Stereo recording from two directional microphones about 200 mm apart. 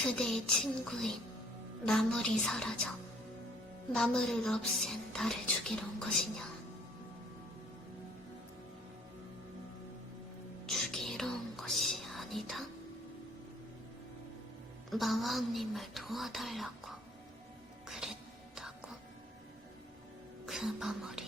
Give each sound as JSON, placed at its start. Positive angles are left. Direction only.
{"t": 0.0, "sound": "a woman's voice", "side_deg": 5}
{"t": 3.9, "sound": "a woman's voice", "side_deg": 5}
{"t": 10.7, "sound": "whispering", "side_deg": 0}
{"t": 14.8, "sound": "a woman's voice", "side_deg": 0}
{"t": 17.8, "sound": "music", "side_deg": -5}
{"t": 20.4, "sound": "speech", "side_deg": 0}